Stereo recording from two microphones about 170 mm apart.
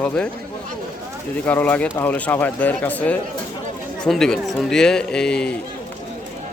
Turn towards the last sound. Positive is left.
turn(degrees=5)  # may be behind; listen again after turning